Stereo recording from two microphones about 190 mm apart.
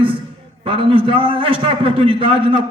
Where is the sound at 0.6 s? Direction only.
30° right (ahead or behind).